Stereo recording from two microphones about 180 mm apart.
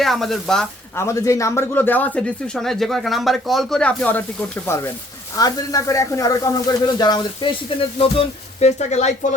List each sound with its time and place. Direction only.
0.0 s speech: centre (ahead or behind)
0.9 s speech: 15° left (ahead or behind); by 9.1 s 40° left (ahead or behind)